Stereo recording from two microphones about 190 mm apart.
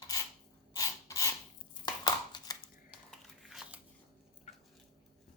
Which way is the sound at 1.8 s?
20° left (ahead or behind).